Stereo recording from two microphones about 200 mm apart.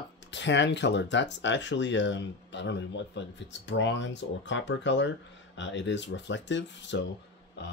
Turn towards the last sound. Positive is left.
turn(degrees=65)  # may be behind; listen again after turning